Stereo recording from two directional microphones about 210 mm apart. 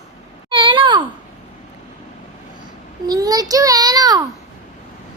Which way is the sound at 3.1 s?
20° right (ahead or behind).